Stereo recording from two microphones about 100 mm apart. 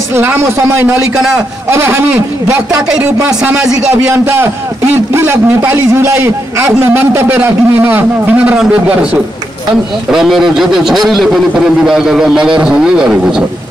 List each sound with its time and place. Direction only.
0.1 s a man's voice: 20° right (ahead or behind)
1.1 s a man's voice: 5° right (ahead or behind)
1.7 s a man's voice: 25° right (ahead or behind)
2.9 s a man's voice: 10° right (ahead or behind)